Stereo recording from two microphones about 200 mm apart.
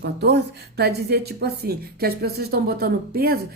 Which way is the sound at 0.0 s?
55° right (ahead or behind).